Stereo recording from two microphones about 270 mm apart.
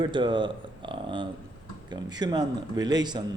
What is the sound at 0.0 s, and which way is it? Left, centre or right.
A man's voice, centre.